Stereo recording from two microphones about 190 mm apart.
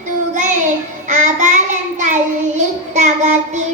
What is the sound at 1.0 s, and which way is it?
Child singing, 40° right (ahead or behind).